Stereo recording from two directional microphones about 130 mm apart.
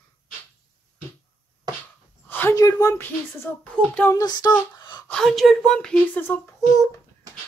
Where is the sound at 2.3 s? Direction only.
15° left (ahead or behind).